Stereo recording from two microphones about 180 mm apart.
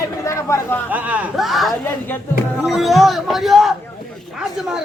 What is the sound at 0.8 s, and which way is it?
A man's voice, 10° right (ahead or behind).